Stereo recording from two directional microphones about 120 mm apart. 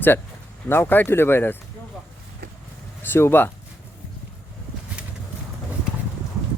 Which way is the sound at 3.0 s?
20° left (ahead or behind).